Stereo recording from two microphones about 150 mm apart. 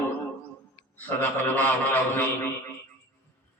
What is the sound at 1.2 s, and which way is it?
A man's voice, 10° left (ahead or behind).